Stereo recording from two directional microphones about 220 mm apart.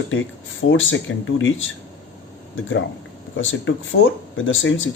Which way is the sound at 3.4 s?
60° left (ahead or behind).